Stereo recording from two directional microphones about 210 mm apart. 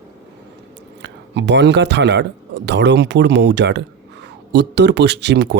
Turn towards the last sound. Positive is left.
turn(degrees=-55)  # may be behind; listen again after turning